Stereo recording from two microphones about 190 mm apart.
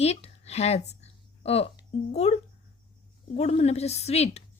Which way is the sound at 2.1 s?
35° left (ahead or behind).